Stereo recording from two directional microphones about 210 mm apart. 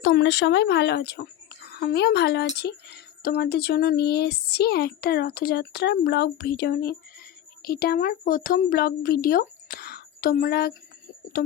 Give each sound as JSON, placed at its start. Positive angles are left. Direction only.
{"t": 0.0, "sound": "speech", "side_deg": 55}